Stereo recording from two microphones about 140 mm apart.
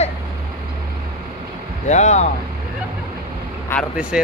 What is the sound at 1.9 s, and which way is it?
Speech, 55° left (ahead or behind).